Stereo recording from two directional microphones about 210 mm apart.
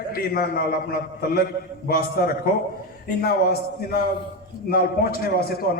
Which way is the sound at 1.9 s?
45° left (ahead or behind).